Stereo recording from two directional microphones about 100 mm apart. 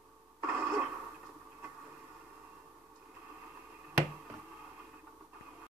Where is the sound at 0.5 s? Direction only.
20° right (ahead or behind).